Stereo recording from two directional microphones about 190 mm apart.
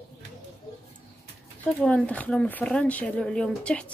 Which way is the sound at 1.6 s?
5° left (ahead or behind).